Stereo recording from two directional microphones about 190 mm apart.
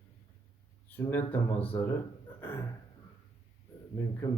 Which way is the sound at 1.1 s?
10° left (ahead or behind).